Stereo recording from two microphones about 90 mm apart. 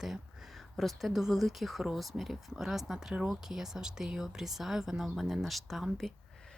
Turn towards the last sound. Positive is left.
turn(degrees=0)  # may be behind; listen again after turning